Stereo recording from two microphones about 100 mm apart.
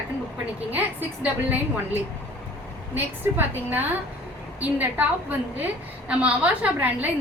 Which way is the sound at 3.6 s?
20° right (ahead or behind).